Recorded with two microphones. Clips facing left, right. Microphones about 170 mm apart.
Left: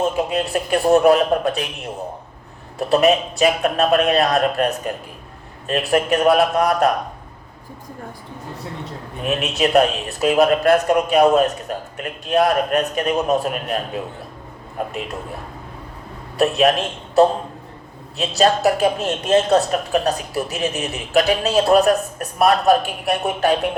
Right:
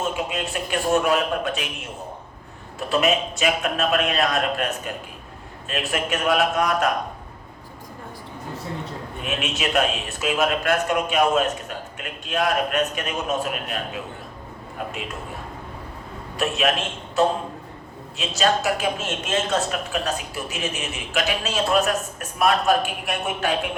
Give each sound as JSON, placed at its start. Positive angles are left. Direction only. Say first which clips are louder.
{"t": 0.0, "sound": "speech", "louder": "left 6 dB", "side_deg": 35}
{"t": 9.2, "sound": "speech", "louder": "left 7 dB", "side_deg": 35}
{"t": 16.4, "sound": "speech", "louder": "left 7 dB", "side_deg": 35}
{"t": 18.2, "sound": "speech", "louder": "left 6 dB", "side_deg": 35}